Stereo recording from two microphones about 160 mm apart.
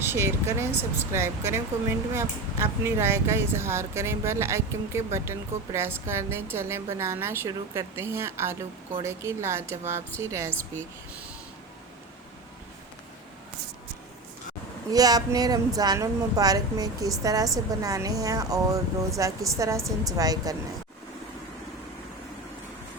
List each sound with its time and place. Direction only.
0.0 s speech: 15° right (ahead or behind)
14.8 s a woman's voice: 25° right (ahead or behind)